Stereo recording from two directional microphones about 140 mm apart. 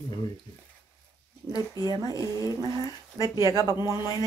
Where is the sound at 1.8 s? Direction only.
25° left (ahead or behind).